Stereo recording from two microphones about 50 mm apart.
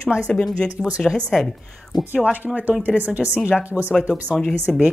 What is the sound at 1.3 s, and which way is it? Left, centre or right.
Speech, centre.